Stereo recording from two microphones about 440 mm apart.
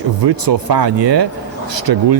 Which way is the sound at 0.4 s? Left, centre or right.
Right.